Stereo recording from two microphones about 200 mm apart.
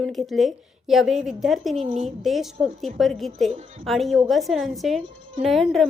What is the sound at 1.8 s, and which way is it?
Speech, 35° right (ahead or behind).